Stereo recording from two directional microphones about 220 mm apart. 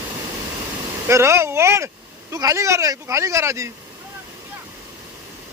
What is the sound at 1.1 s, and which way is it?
Speech, 10° right (ahead or behind).